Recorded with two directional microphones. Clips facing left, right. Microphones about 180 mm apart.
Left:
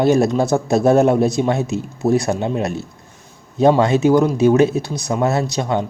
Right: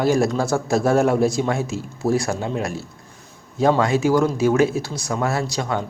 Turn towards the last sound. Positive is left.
turn(degrees=20)  # may be behind; listen again after turning